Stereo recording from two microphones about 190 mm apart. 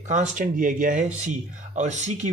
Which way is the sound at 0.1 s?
40° right (ahead or behind).